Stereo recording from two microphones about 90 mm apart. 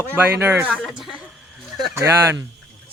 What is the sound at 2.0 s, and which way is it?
Speech, 30° right (ahead or behind).